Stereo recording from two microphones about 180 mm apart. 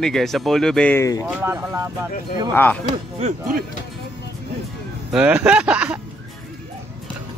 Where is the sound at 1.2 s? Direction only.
15° right (ahead or behind).